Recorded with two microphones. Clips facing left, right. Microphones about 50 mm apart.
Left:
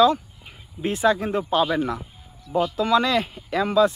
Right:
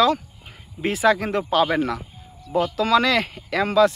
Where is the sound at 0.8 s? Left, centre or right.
Right.